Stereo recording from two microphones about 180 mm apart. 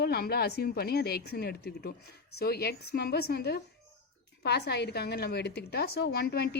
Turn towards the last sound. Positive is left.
turn(degrees=60)  # may be behind; listen again after turning